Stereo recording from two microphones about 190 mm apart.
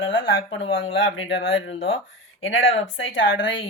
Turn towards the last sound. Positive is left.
turn(degrees=80)